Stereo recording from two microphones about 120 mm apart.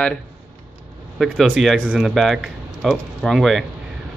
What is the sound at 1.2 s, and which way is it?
Speech, centre (ahead or behind).